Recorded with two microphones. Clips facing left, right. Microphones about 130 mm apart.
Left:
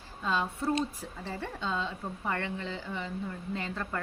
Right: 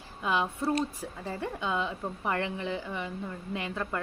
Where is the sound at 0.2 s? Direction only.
15° right (ahead or behind).